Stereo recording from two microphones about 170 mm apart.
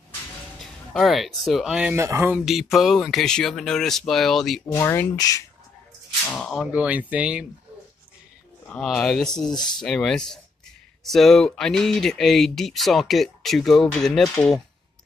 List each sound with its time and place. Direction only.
0.6 s speech: centre (ahead or behind)
2.0 s speech: 15° right (ahead or behind)
2.3 s speech: centre (ahead or behind)
4.8 s speech: 20° left (ahead or behind)
6.2 s speech: 5° left (ahead or behind)
8.6 s speech: 5° left (ahead or behind)
9.5 s speech: 25° left (ahead or behind)
9.8 s speech: 5° left (ahead or behind)